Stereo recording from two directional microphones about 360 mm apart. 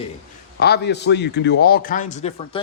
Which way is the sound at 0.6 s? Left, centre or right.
Left.